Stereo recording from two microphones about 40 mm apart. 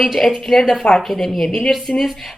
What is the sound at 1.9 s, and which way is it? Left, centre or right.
Speech, left.